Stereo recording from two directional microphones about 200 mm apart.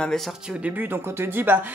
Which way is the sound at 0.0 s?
Centre (ahead or behind).